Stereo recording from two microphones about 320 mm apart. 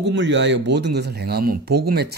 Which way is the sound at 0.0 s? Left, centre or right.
Right.